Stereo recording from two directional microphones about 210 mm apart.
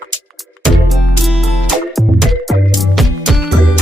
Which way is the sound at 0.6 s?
Centre (ahead or behind).